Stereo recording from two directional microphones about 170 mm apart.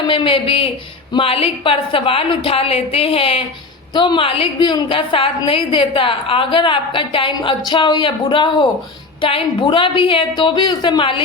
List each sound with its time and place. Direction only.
0.1 s a woman's voice: 30° left (ahead or behind)